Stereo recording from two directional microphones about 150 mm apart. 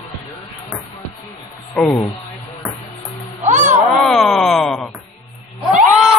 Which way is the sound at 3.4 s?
55° right (ahead or behind).